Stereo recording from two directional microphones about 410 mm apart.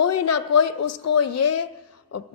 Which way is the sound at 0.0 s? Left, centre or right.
Left.